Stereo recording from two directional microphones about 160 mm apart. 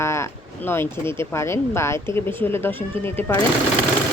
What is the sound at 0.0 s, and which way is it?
Speech, 15° left (ahead or behind).